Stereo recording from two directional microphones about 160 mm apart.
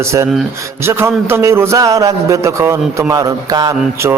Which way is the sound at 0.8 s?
15° right (ahead or behind).